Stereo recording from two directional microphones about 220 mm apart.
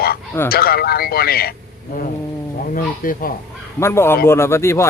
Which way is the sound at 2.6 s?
40° left (ahead or behind).